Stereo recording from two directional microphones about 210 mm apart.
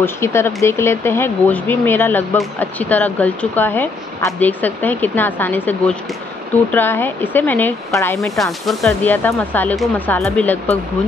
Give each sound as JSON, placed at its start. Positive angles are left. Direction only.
{"t": 0.0, "sound": "speech", "side_deg": 10}